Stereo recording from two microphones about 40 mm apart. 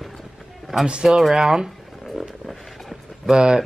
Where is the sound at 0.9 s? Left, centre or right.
Right.